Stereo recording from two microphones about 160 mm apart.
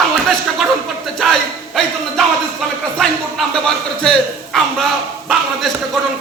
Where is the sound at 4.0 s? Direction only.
5° left (ahead or behind).